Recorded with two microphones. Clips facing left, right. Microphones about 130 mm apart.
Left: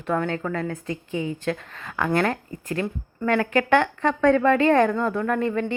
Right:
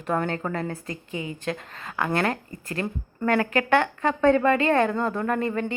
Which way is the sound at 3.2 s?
30° right (ahead or behind).